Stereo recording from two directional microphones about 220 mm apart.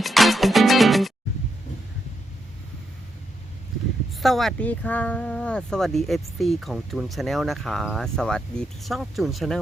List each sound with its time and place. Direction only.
0.0 s music: centre (ahead or behind)
4.2 s speech: centre (ahead or behind)